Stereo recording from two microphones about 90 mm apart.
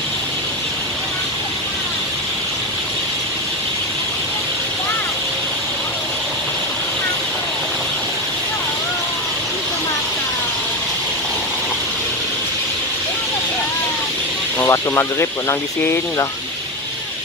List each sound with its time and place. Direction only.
14.6 s speech: 30° left (ahead or behind)